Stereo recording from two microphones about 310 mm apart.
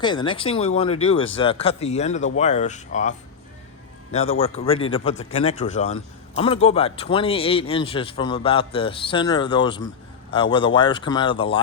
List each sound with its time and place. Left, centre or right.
0.0 s a man's voice: centre